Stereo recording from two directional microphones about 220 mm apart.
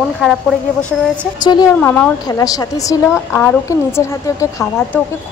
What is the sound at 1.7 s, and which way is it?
A woman's voice, 5° left (ahead or behind).